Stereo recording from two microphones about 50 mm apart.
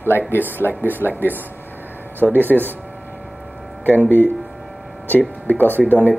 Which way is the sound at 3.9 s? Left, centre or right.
Right.